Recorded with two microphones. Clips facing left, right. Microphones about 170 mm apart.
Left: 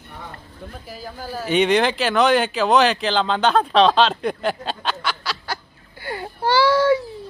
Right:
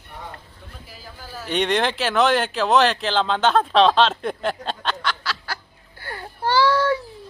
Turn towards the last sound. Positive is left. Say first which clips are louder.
# left 3 dB
turn(degrees=10)  # may be behind; listen again after turning